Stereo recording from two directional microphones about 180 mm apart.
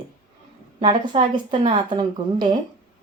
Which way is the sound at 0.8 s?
25° right (ahead or behind).